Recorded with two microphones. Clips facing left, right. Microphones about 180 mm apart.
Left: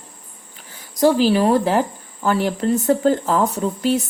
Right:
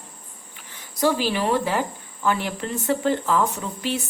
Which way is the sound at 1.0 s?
40° left (ahead or behind).